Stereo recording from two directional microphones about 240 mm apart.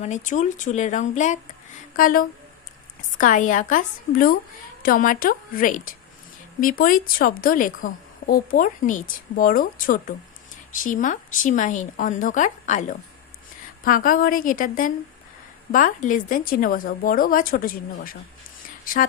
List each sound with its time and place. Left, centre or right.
0.0 s speech: left